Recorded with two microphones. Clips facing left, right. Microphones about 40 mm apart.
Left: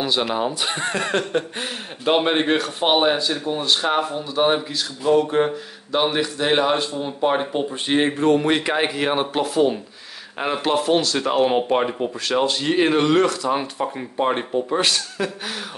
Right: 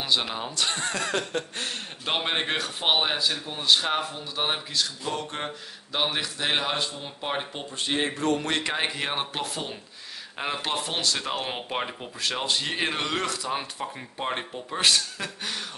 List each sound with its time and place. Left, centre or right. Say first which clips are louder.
0.0 s speech: left 6 dB; centre; by 1.4 s left
2.0 s speech: left 9 dB; centre
7.8 s speech: left 6 dB; left; by 15.5 s centre